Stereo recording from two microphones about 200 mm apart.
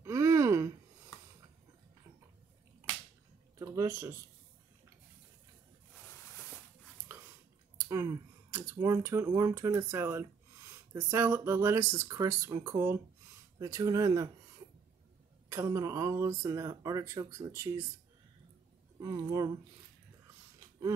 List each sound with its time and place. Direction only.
0.0 s gasp: 15° right (ahead or behind)
3.5 s a sound: 15° right (ahead or behind)
7.1 s speech: 10° right (ahead or behind)
15.5 s speech: 15° right (ahead or behind)
18.9 s speech: 15° right (ahead or behind)